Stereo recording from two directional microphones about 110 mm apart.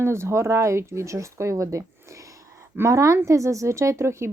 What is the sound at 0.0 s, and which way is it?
A woman's voice, 25° right (ahead or behind).